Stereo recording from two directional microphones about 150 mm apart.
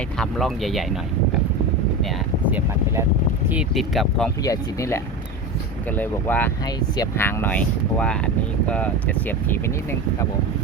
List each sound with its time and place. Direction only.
0.2 s speech: centre (ahead or behind)
2.5 s speech: 15° right (ahead or behind)
3.5 s speech: 5° right (ahead or behind)
4.4 s speech: 20° left (ahead or behind)
6.7 s speech: 25° left (ahead or behind)
7.2 s speech: 15° left (ahead or behind)